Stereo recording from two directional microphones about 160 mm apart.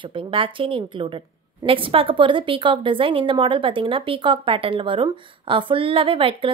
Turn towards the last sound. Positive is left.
turn(degrees=-35)  # may be behind; listen again after turning